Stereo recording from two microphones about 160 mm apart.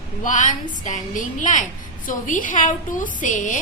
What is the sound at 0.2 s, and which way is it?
A woman's voice, 50° left (ahead or behind).